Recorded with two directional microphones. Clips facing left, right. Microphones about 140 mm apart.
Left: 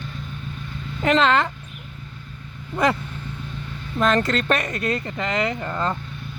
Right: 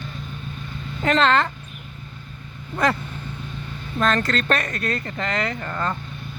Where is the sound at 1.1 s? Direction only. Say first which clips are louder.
Even; 10° left (ahead or behind).